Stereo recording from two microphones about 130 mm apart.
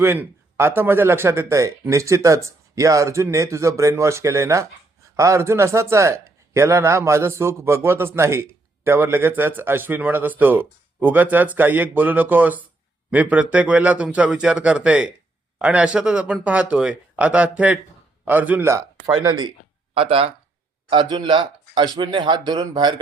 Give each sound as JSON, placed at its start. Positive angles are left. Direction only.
{"t": 0.0, "sound": "a man's voice", "side_deg": -20}
{"t": 18.7, "sound": "speech", "side_deg": -25}
{"t": 19.2, "sound": "speech", "side_deg": -35}
{"t": 19.9, "sound": "speech", "side_deg": -45}